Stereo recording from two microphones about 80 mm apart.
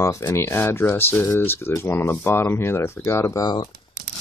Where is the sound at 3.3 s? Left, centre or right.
Left.